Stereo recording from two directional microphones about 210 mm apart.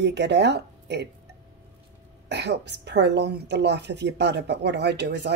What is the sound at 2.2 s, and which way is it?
A woman's voice, 55° right (ahead or behind).